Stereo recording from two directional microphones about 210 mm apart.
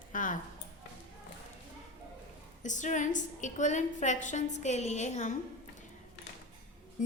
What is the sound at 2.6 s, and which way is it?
A woman's voice, 35° left (ahead or behind).